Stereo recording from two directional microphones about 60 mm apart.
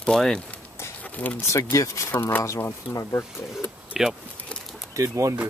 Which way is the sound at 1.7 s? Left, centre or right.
Left.